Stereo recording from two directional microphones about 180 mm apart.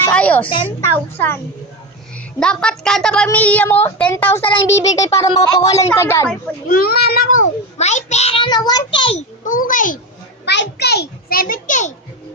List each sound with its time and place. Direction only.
0.1 s a sound: 10° left (ahead or behind)
0.4 s a woman's voice: 30° left (ahead or behind)
0.8 s a woman's voice: 15° left (ahead or behind)
6.7 s a child's voice: 55° left (ahead or behind); by 9.2 s 30° left (ahead or behind)
9.4 s a child's voice: 50° left (ahead or behind)
10.4 s a child's voice: 70° left (ahead or behind); by 11.9 s 45° left (ahead or behind)